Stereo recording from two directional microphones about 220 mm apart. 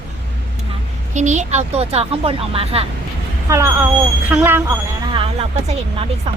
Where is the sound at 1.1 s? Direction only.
30° right (ahead or behind).